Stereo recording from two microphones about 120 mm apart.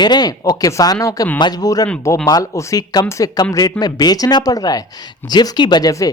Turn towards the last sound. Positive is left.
turn(degrees=30)  # may be behind; listen again after turning